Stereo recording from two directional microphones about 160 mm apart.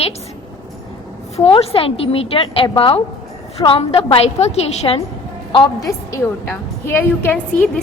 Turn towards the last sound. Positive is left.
turn(degrees=10)  # may be behind; listen again after turning